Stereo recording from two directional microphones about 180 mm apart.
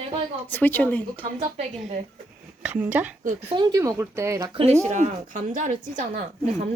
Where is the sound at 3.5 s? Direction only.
20° right (ahead or behind).